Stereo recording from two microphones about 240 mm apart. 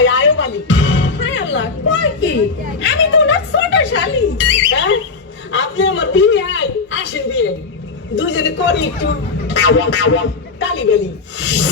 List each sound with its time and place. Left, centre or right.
0.0 s music: left
2.7 s a sound: left
8.1 s a woman's voice: left